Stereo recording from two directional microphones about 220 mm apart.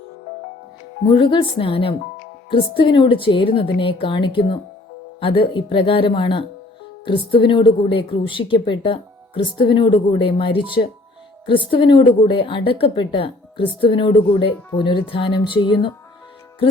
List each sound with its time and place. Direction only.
1.0 s a woman's voice: 25° left (ahead or behind)